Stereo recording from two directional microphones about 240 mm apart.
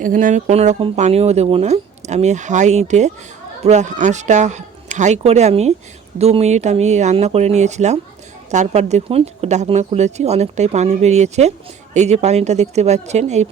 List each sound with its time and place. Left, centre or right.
0.0 s speech: right